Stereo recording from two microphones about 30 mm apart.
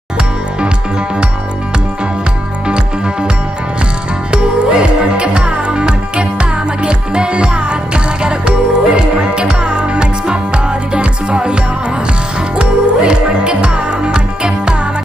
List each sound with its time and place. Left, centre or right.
4.3 s music: right
12.5 s music: right